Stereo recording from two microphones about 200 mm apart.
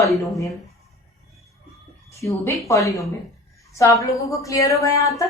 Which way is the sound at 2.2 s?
15° left (ahead or behind).